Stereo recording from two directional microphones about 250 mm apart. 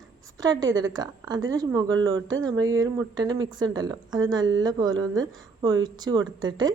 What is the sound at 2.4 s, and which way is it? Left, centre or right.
A woman's voice, centre.